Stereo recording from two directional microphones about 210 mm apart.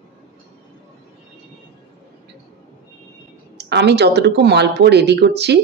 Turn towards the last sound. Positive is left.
turn(degrees=-55)  # may be behind; listen again after turning